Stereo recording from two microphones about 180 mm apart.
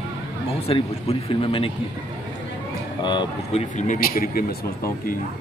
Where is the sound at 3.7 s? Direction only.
45° left (ahead or behind).